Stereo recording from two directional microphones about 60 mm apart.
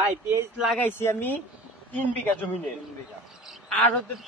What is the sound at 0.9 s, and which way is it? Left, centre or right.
Speech, left.